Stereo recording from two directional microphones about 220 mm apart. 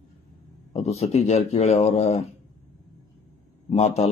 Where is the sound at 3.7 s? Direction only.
30° left (ahead or behind).